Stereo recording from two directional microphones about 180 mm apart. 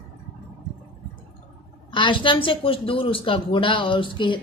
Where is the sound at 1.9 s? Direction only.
25° left (ahead or behind).